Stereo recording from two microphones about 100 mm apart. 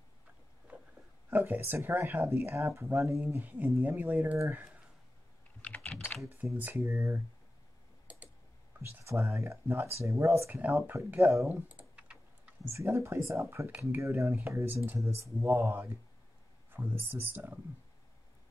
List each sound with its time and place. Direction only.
0.7 s a sound: 15° right (ahead or behind)
1.3 s speech: 20° right (ahead or behind)
6.5 s speech: 20° right (ahead or behind)
8.1 s typing: 15° right (ahead or behind)
8.8 s speech: 30° right (ahead or behind)
11.9 s typing: 15° right (ahead or behind)
12.6 s speech: 30° right (ahead or behind)